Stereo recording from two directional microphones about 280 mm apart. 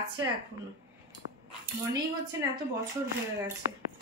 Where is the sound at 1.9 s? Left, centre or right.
Centre.